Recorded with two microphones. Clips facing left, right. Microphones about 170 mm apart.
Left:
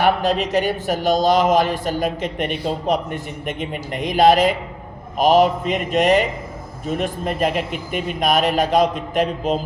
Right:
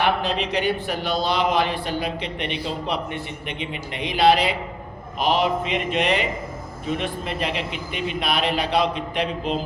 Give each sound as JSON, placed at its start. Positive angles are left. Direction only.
{"t": 0.0, "sound": "speech", "side_deg": 45}